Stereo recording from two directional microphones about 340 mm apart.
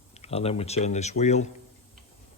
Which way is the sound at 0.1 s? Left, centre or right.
Centre.